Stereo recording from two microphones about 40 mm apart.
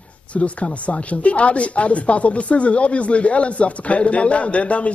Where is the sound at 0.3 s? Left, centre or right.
Left.